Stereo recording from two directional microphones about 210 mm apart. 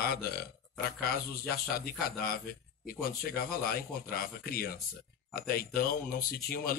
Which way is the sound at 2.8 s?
45° left (ahead or behind).